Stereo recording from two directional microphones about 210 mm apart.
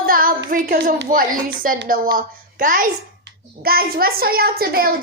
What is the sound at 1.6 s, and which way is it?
A woman's voice, 40° right (ahead or behind).